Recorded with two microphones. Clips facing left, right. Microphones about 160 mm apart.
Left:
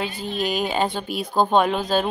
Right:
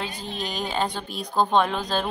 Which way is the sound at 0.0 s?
5° left (ahead or behind).